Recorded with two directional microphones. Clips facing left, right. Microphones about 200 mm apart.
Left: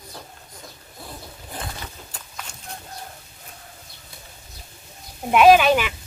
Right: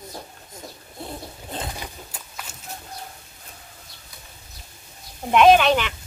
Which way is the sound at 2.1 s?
5° right (ahead or behind).